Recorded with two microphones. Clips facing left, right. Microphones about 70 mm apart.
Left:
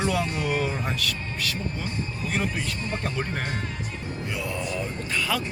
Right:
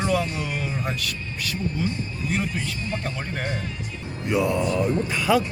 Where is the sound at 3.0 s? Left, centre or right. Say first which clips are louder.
Left 1 dB; centre.